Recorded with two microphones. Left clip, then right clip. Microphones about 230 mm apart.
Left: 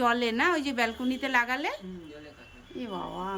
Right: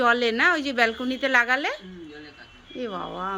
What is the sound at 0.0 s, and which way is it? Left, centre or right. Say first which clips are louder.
A woman's voice: right 5 dB; centre.